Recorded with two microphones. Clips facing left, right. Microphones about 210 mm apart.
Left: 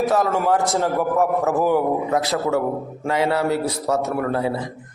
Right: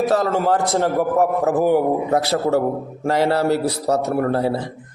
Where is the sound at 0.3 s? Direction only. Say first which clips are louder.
Right 1 dB; 30° right (ahead or behind).